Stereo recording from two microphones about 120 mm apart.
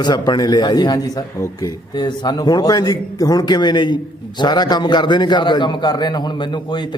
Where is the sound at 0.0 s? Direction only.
35° left (ahead or behind).